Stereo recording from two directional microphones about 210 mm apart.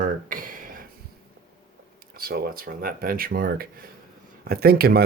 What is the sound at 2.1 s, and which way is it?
Speech, 45° right (ahead or behind).